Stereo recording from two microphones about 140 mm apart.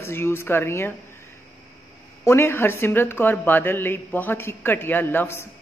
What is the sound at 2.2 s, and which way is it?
A woman's voice, 15° left (ahead or behind).